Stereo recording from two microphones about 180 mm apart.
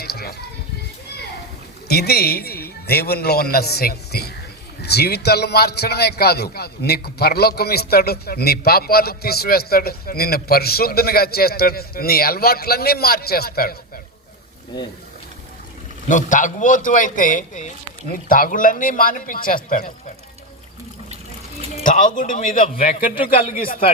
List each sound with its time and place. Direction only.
0.0 s a sound: 60° left (ahead or behind)
1.9 s a man's voice: 60° left (ahead or behind)
16.0 s a man's voice: 45° left (ahead or behind)
21.8 s a man's voice: 45° left (ahead or behind)
23.2 s speech: 30° left (ahead or behind)
23.5 s a man's voice: 50° left (ahead or behind)